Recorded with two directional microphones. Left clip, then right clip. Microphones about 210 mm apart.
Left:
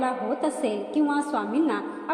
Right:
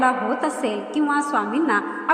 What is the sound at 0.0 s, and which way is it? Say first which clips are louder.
A woman's voice: right 6 dB; 25° right (ahead or behind).